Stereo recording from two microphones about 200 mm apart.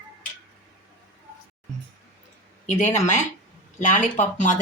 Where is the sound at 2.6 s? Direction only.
35° left (ahead or behind).